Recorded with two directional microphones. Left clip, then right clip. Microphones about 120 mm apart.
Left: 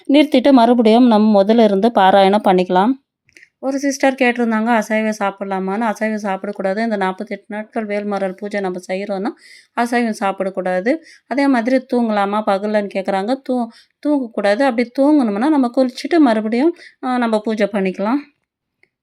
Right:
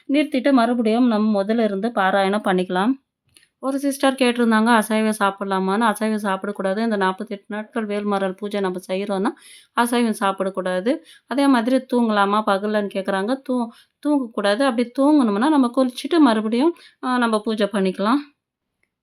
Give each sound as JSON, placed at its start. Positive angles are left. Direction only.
{"t": 0.1, "sound": "speech", "side_deg": 55}
{"t": 2.4, "sound": "a woman's voice", "side_deg": 30}
{"t": 16.8, "sound": "speech", "side_deg": 25}
{"t": 17.7, "sound": "speech", "side_deg": 15}